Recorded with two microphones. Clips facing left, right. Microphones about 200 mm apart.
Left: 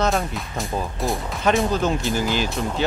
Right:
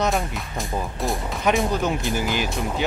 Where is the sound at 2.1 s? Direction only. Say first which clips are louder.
Left 2 dB; 15° right (ahead or behind).